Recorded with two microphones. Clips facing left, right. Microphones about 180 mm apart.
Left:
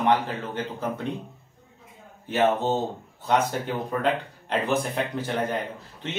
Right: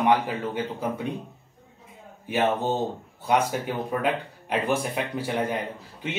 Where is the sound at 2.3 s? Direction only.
10° right (ahead or behind).